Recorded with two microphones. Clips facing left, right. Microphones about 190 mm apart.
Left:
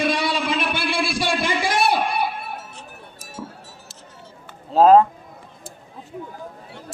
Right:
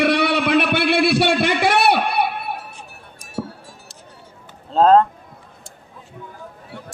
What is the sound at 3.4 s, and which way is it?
Music, 90° right.